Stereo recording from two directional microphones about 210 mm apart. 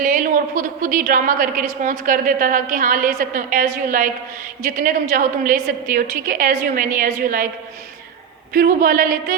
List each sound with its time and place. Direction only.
0.0 s a woman's voice: 40° right (ahead or behind)
8.5 s speech: 40° right (ahead or behind)